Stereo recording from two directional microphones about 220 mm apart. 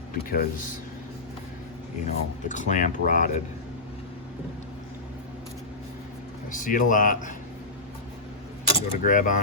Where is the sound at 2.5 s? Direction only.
35° left (ahead or behind).